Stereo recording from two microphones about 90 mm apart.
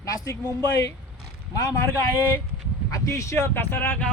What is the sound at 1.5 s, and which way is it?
A man's voice, 35° left (ahead or behind).